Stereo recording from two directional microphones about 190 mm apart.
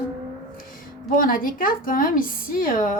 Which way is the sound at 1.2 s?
50° left (ahead or behind).